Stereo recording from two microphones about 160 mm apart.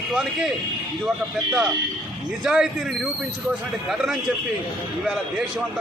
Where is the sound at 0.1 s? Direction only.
5° right (ahead or behind).